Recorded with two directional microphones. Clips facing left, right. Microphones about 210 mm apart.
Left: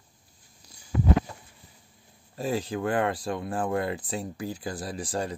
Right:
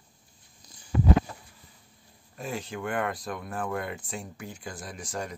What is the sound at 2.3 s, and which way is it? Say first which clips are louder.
Speech: left 6 dB; 35° left (ahead or behind).